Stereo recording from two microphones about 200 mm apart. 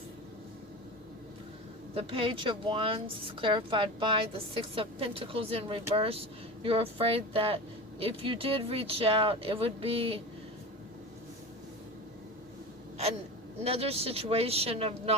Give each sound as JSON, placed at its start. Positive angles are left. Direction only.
{"t": 2.0, "sound": "speech", "side_deg": -30}
{"t": 13.7, "sound": "speech", "side_deg": -30}